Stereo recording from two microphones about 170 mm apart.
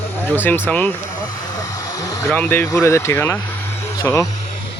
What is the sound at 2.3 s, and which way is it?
Speech, 10° left (ahead or behind).